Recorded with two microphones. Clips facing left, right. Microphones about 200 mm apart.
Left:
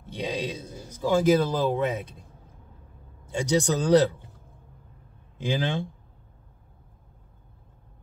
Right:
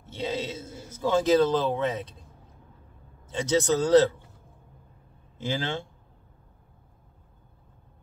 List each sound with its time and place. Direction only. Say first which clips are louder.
0.1 s a man's voice: left 1 dB; 15° left (ahead or behind)
3.3 s speech: even; 10° left (ahead or behind)
5.4 s speech: left 3 dB; 15° left (ahead or behind)